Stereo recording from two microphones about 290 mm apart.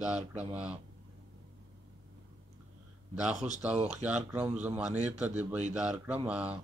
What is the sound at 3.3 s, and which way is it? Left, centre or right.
Speech, right.